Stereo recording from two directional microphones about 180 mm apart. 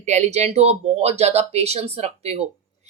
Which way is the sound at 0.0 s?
40° right (ahead or behind).